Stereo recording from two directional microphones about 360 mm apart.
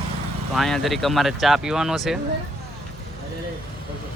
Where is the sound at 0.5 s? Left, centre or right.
Centre.